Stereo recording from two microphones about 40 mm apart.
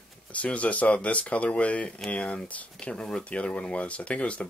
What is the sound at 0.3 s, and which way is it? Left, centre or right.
Speech, left.